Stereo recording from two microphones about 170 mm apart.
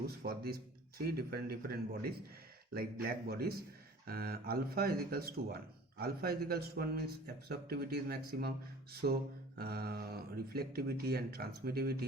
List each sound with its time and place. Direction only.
0.2 s speech: 65° right (ahead or behind)